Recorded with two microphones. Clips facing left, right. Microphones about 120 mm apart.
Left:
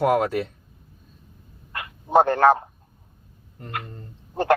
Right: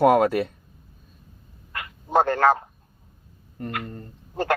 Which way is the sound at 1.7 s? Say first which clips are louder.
Left 3 dB; 20° left (ahead or behind).